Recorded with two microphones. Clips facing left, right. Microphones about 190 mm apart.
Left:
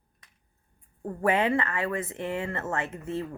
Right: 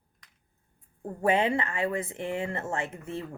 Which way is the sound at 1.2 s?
20° right (ahead or behind).